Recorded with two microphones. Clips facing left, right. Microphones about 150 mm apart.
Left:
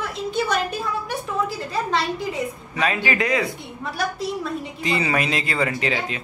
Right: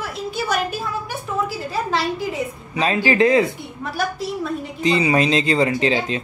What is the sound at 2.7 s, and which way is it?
Speech, 30° right (ahead or behind).